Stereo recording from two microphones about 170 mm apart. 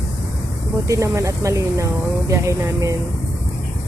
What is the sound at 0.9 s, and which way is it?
Speech, 20° right (ahead or behind).